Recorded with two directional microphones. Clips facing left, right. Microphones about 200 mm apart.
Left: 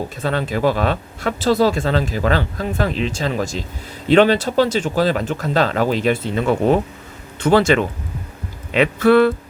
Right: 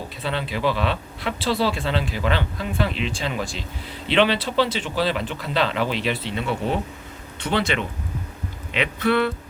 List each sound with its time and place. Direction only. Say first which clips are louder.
0.2 s speech: left 5 dB; 45° left (ahead or behind)